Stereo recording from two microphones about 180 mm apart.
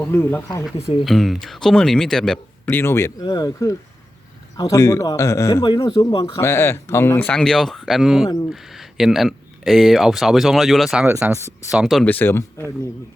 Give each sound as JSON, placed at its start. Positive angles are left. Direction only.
{"t": 0.0, "sound": "a man's voice", "side_deg": 15}
{"t": 0.8, "sound": "speech", "side_deg": 35}
{"t": 1.0, "sound": "a man's voice", "side_deg": 0}
{"t": 5.6, "sound": "speech", "side_deg": 25}
{"t": 6.4, "sound": "a man's voice", "side_deg": 15}